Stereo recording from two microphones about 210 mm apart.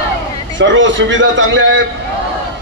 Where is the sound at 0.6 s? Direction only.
60° right (ahead or behind).